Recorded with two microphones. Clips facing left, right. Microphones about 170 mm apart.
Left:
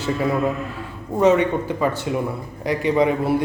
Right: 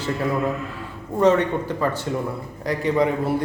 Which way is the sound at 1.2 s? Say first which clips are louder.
Left 1 dB; 10° left (ahead or behind).